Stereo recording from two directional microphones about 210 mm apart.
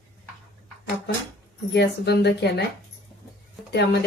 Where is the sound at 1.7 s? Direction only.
55° left (ahead or behind).